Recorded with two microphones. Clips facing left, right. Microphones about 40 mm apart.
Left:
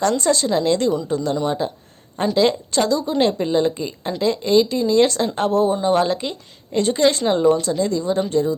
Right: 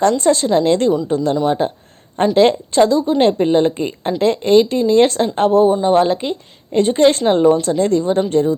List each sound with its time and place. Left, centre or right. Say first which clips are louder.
0.2 s a woman's voice: right 5 dB; right